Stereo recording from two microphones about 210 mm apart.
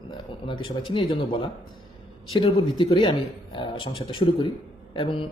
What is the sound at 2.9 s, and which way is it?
A man's voice, 20° left (ahead or behind).